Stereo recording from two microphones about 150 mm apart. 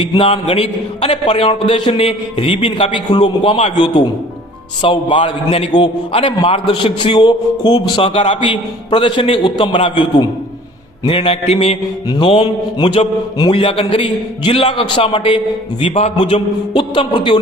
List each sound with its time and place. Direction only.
0.0 s a man's voice: 40° left (ahead or behind)
12.0 s a man's voice: 30° left (ahead or behind)